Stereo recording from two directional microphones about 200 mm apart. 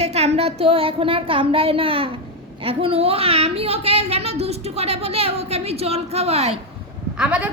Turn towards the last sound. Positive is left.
turn(degrees=-5)  # may be behind; listen again after turning